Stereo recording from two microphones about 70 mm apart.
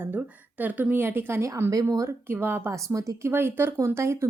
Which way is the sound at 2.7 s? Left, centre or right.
Right.